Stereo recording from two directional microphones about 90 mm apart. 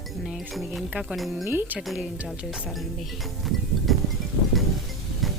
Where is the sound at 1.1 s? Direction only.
Centre (ahead or behind).